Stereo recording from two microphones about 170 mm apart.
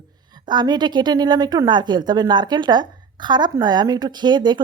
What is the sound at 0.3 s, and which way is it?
Speech, 25° right (ahead or behind).